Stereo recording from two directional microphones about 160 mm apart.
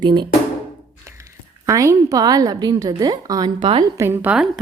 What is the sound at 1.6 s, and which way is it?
A woman's voice, 20° right (ahead or behind).